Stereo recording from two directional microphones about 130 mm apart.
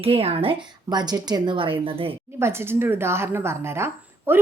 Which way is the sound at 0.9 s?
30° right (ahead or behind).